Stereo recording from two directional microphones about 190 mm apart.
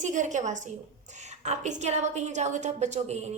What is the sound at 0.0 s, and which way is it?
A woman's voice, 40° right (ahead or behind).